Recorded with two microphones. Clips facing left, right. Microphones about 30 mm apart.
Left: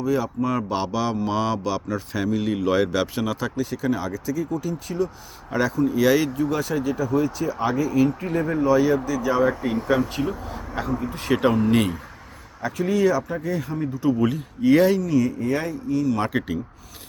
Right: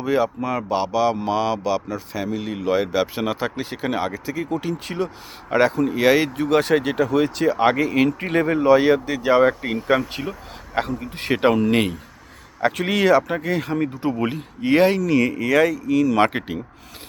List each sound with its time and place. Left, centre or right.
0.0 s speech: right
0.4 s speech: centre
3.2 s speech: right
4.5 s speech: right
6.3 s speech: right
8.5 s speech: right
10.8 s speech: right
11.3 s speech: right
12.6 s speech: right
14.1 s speech: right
15.1 s speech: right